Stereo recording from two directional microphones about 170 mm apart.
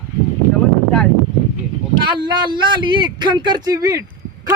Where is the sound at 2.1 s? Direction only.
25° right (ahead or behind).